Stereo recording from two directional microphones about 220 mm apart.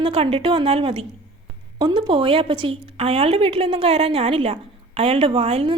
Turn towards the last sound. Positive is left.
turn(degrees=-25)  # may be behind; listen again after turning